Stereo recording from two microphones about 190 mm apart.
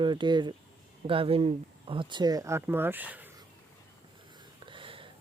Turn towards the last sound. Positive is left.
turn(degrees=-25)  # may be behind; listen again after turning